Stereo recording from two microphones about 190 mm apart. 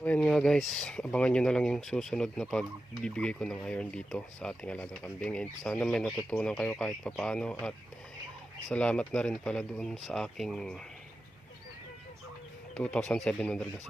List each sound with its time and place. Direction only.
0.0 s speech: 5° left (ahead or behind)
8.7 s speech: 5° left (ahead or behind)
12.7 s speech: 5° left (ahead or behind)